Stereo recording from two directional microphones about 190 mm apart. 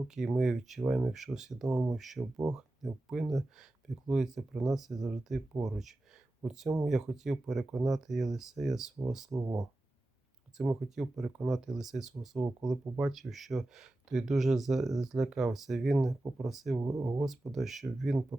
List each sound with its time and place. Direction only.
0.1 s speech: centre (ahead or behind)
2.1 s speech: 15° right (ahead or behind)
2.5 s speech: 5° right (ahead or behind)
10.6 s speech: centre (ahead or behind)
16.8 s speech: 20° right (ahead or behind)
17.2 s speech: centre (ahead or behind)